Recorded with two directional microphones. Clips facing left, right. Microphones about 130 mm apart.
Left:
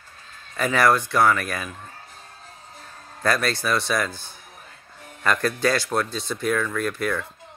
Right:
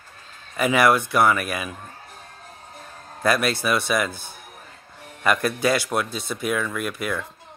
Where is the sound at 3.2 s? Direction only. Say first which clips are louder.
Right 2 dB; 10° right (ahead or behind).